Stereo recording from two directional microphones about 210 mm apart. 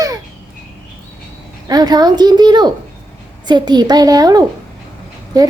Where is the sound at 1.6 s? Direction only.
20° right (ahead or behind).